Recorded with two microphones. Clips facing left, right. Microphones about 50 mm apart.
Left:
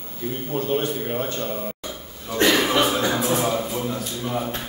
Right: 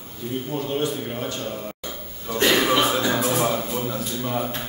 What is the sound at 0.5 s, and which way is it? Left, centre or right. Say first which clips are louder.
Speech: left 3 dB; left.